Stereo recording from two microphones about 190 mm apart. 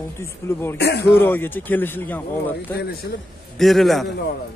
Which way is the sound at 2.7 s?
55° left (ahead or behind).